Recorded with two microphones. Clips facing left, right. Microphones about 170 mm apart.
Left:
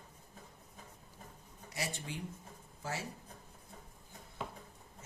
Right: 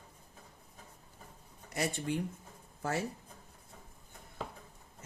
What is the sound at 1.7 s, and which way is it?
Speech, 55° right (ahead or behind).